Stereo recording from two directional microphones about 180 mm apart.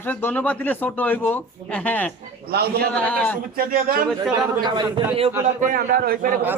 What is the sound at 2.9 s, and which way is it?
Speech, 5° left (ahead or behind).